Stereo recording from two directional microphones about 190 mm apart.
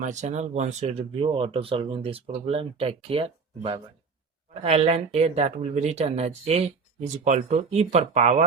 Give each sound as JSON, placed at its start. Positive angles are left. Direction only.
{"t": 0.0, "sound": "speech", "side_deg": -40}